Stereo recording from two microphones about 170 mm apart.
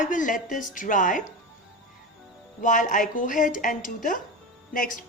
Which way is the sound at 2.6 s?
50° left (ahead or behind).